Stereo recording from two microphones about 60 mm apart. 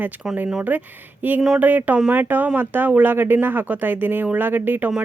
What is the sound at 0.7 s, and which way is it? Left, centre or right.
A woman's voice, right.